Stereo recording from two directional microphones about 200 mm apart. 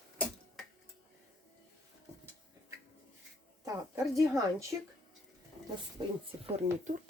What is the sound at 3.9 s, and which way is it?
Speech, 15° right (ahead or behind).